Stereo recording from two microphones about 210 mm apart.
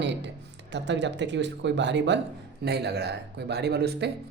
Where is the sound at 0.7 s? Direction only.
55° right (ahead or behind).